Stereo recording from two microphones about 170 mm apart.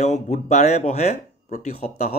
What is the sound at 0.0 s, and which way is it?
Speech, 40° left (ahead or behind).